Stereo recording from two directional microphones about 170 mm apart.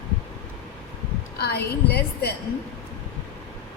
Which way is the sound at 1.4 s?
70° left (ahead or behind).